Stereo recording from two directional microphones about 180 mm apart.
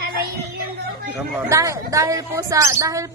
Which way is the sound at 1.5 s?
15° right (ahead or behind).